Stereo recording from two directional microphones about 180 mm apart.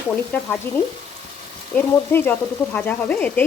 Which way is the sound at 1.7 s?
10° left (ahead or behind).